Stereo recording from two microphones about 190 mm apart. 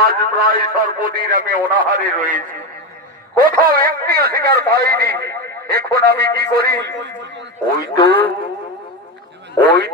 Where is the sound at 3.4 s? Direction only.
50° right (ahead or behind).